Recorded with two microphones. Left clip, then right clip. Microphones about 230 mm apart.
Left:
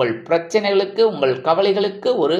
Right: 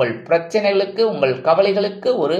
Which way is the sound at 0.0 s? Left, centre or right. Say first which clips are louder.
Right 1 dB; centre.